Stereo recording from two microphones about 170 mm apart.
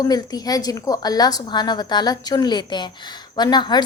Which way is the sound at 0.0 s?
20° left (ahead or behind).